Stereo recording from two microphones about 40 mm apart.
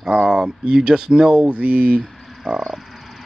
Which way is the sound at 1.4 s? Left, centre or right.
Right.